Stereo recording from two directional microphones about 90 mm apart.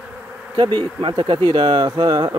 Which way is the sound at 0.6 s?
55° right (ahead or behind).